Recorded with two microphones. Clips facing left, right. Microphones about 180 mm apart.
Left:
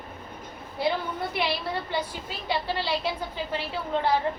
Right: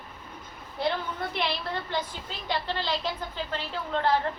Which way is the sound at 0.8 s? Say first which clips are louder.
Left 2 dB; 10° left (ahead or behind).